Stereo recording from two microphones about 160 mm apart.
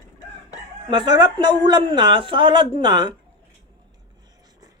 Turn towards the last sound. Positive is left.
turn(degrees=-30)  # may be behind; listen again after turning